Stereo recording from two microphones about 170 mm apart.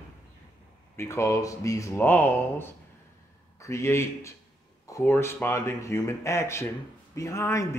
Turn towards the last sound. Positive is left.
turn(degrees=15)  # may be behind; listen again after turning